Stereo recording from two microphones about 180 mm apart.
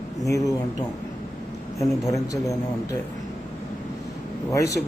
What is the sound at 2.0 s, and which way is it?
Speech, 20° left (ahead or behind).